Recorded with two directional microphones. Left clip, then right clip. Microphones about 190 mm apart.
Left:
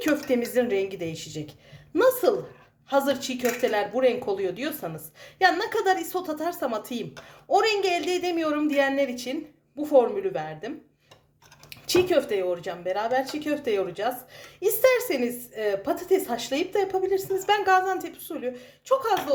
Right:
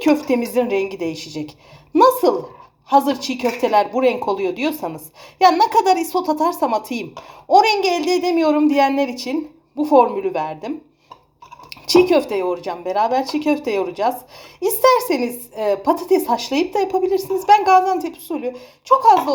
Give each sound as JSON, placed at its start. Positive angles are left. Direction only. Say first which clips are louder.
{"t": 0.1, "sound": "speech", "louder": "right 7 dB", "side_deg": 0}
{"t": 2.9, "sound": "speech", "louder": "right 8 dB", "side_deg": -5}
{"t": 11.7, "sound": "speech", "louder": "right 8 dB", "side_deg": -5}